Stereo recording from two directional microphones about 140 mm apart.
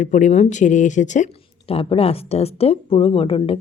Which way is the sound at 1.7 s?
40° left (ahead or behind).